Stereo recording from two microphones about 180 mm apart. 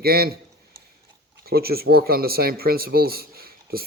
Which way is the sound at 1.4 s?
60° right (ahead or behind).